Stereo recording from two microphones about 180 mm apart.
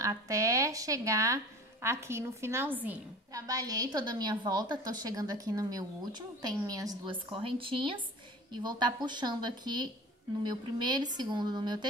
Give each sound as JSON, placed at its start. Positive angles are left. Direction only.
{"t": 0.0, "sound": "speech", "side_deg": -20}
{"t": 3.4, "sound": "a woman's voice", "side_deg": -20}